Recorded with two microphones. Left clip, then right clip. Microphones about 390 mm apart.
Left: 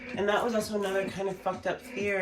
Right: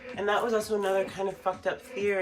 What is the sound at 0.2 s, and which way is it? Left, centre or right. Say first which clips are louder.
Speech: right 1 dB; centre.